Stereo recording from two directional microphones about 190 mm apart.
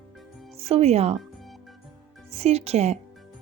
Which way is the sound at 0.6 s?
35° right (ahead or behind).